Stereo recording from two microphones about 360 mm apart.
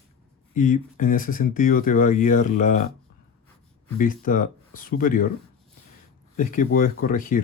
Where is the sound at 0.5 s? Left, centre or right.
Left.